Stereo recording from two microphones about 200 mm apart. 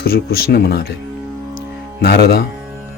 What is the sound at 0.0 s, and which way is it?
Speech, 50° left (ahead or behind).